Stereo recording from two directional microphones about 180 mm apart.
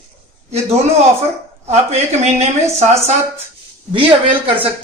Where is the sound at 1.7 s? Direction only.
40° right (ahead or behind).